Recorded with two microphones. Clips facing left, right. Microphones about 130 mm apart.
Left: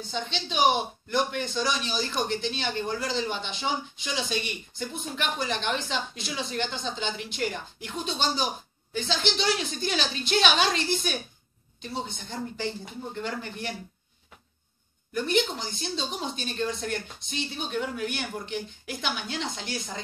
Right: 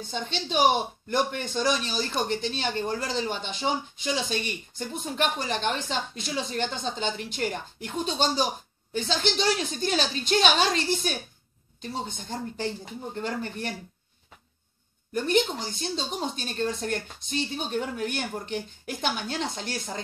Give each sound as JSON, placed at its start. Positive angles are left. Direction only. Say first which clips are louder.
{"t": 0.1, "sound": "speech", "louder": "right 3 dB", "side_deg": -45}
{"t": 15.2, "sound": "speech", "louder": "right 2 dB", "side_deg": -45}